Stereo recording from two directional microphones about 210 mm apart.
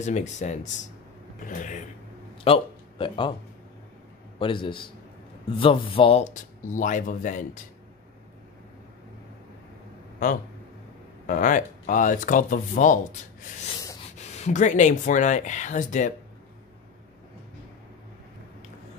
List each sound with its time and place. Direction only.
0.0 s speech: 35° left (ahead or behind)
2.4 s speech: 25° left (ahead or behind)
4.4 s a man's voice: 25° left (ahead or behind)
11.2 s speech: 40° left (ahead or behind)
14.1 s speech: 35° left (ahead or behind)